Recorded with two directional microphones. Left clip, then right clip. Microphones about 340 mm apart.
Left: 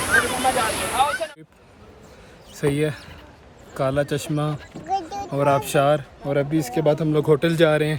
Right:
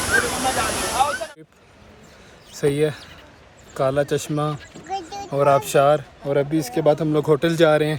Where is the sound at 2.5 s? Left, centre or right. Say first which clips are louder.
Right 3 dB; centre.